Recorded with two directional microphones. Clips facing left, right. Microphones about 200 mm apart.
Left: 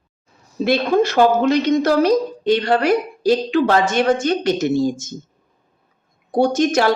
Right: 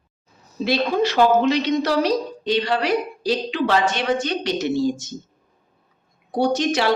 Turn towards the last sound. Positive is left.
turn(degrees=45)  # may be behind; listen again after turning